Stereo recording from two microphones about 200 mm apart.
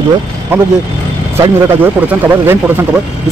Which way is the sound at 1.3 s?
10° right (ahead or behind).